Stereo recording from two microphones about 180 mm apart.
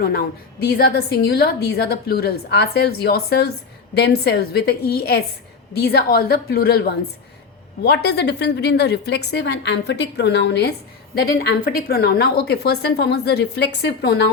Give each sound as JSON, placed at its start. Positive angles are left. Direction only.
{"t": 0.0, "sound": "a woman's voice", "side_deg": 60}
{"t": 11.3, "sound": "a woman's voice", "side_deg": 55}